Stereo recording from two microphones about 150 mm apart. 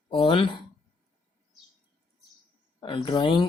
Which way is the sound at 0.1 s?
35° left (ahead or behind).